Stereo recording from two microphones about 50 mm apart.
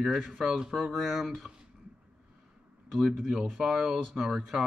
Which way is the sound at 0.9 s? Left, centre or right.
Centre.